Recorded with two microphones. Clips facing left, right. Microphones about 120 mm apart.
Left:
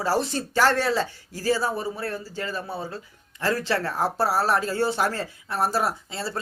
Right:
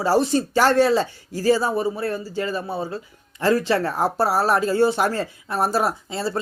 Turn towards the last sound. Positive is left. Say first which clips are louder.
# right 6 dB
turn(degrees=-20)  # may be behind; listen again after turning